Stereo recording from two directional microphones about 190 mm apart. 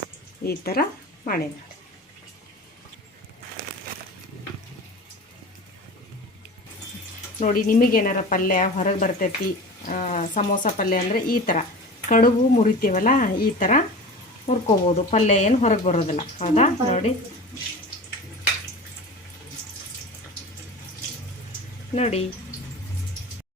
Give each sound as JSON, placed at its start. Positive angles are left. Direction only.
{"t": 0.4, "sound": "a woman's voice", "side_deg": 55}
{"t": 7.3, "sound": "a woman's voice", "side_deg": 40}
{"t": 21.9, "sound": "speech", "side_deg": 35}